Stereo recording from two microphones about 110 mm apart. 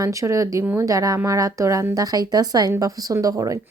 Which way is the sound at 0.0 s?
30° right (ahead or behind).